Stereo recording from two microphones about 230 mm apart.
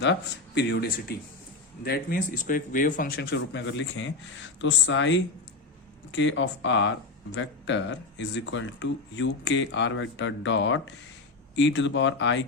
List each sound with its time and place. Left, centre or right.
0.0 s speech: left